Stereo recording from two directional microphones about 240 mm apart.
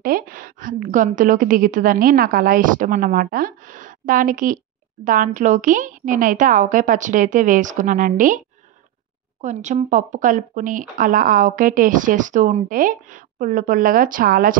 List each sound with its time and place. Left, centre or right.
0.0 s speech: right
9.4 s speech: right